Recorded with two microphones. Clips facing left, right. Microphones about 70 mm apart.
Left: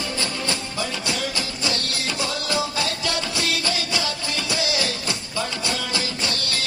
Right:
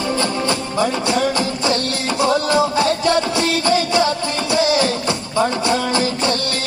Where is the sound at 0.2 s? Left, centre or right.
Right.